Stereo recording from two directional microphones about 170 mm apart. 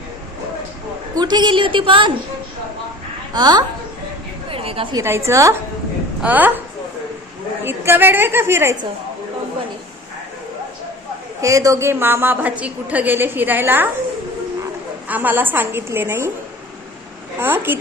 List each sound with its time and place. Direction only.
1.1 s a woman's voice: 25° right (ahead or behind)
3.3 s a woman's voice: 25° right (ahead or behind)
4.4 s a sound: 35° right (ahead or behind)
4.9 s a woman's voice: 15° right (ahead or behind)
7.6 s a woman's voice: 15° right (ahead or behind)
11.3 s a woman's voice: 20° right (ahead or behind)
15.0 s a woman's voice: 10° right (ahead or behind)
17.4 s a woman's voice: 10° right (ahead or behind)